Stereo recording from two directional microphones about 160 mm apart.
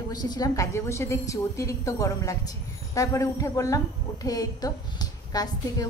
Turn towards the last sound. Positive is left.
turn(degrees=25)  # may be behind; listen again after turning